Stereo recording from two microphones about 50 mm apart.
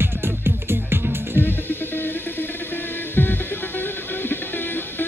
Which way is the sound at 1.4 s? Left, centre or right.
Left.